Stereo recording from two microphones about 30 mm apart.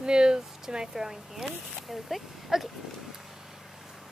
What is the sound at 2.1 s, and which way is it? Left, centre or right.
Speech, centre.